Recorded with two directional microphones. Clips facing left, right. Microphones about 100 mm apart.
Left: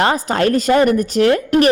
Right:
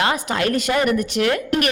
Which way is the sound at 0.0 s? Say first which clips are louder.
Left 5 dB; 35° left (ahead or behind).